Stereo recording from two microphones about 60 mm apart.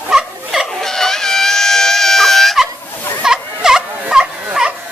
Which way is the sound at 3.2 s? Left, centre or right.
Centre.